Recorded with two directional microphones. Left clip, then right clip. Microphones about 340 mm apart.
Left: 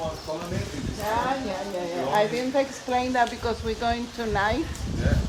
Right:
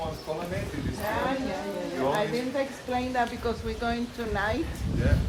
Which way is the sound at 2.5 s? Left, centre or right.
Left.